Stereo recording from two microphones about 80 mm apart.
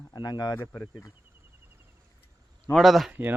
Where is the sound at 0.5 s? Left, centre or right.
Left.